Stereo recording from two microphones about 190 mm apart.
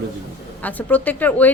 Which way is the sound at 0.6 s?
10° left (ahead or behind).